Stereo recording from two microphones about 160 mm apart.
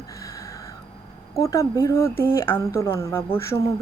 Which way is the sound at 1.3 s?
20° left (ahead or behind).